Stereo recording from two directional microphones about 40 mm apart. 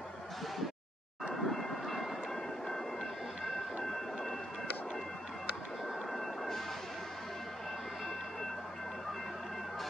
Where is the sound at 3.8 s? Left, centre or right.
Centre.